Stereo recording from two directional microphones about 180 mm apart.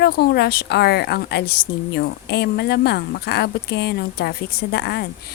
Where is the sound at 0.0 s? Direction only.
65° left (ahead or behind).